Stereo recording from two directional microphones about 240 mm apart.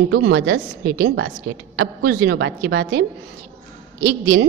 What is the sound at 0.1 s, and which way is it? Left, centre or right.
A woman's voice, right.